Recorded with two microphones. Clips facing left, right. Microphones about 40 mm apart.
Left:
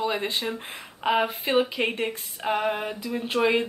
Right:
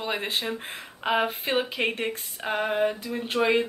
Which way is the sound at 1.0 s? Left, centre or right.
Centre.